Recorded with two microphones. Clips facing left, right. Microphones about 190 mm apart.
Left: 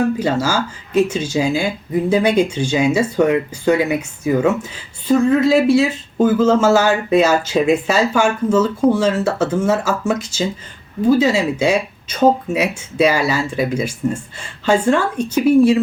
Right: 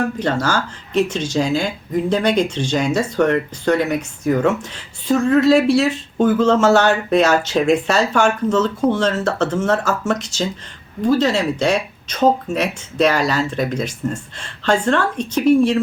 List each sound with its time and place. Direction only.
0.2 s speech: 10° left (ahead or behind)